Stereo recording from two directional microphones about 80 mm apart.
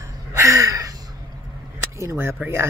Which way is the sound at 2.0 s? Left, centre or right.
Right.